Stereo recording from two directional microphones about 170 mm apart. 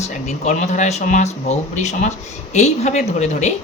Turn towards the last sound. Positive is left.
turn(degrees=40)  # may be behind; listen again after turning